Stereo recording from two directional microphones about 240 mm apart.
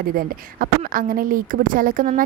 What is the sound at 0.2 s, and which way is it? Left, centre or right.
A woman's voice, right.